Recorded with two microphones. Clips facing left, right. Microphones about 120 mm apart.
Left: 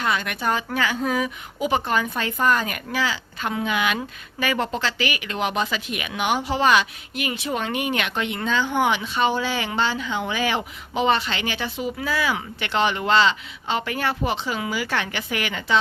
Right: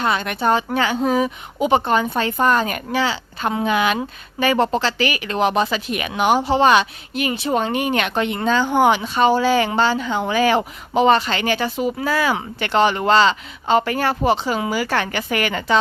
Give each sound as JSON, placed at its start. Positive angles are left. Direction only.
{"t": 0.0, "sound": "a woman's voice", "side_deg": -30}